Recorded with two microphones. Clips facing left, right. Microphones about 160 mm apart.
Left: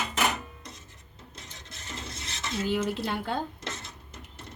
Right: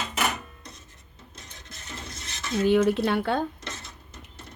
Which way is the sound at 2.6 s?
65° right (ahead or behind).